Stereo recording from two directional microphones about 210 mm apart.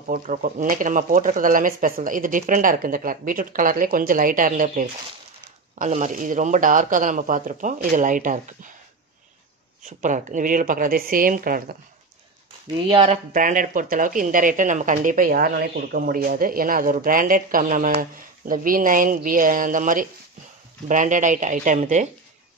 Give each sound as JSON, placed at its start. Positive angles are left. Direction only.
{"t": 0.1, "sound": "speech", "side_deg": -40}
{"t": 9.8, "sound": "speech", "side_deg": -35}
{"t": 12.8, "sound": "speech", "side_deg": -25}